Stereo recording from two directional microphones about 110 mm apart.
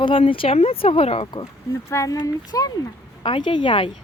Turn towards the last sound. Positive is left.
turn(degrees=50)  # may be behind; listen again after turning